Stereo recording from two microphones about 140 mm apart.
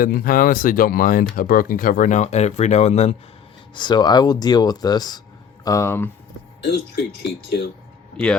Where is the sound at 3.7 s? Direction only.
30° left (ahead or behind).